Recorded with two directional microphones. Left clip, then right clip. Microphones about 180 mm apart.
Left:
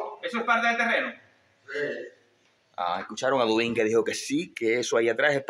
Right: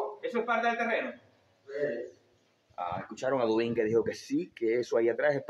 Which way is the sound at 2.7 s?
30° left (ahead or behind).